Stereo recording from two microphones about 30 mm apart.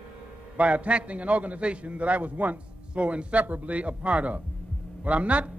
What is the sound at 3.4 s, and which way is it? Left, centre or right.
Speech, right.